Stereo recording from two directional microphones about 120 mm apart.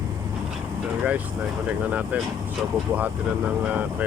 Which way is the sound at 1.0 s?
10° right (ahead or behind).